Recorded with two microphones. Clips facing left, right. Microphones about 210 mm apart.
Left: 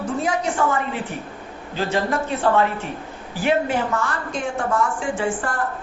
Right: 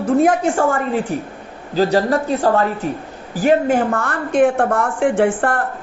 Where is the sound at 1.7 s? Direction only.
35° right (ahead or behind).